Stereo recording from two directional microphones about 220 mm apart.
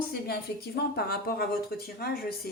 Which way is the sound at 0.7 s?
45° left (ahead or behind).